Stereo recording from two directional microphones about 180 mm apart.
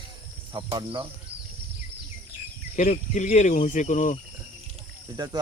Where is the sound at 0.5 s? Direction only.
25° right (ahead or behind).